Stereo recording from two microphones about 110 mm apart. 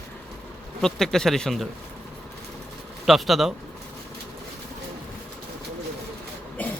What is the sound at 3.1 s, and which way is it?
Speech, centre (ahead or behind).